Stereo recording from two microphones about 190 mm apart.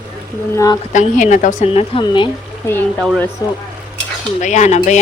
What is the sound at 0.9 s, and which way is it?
Speech, 40° left (ahead or behind).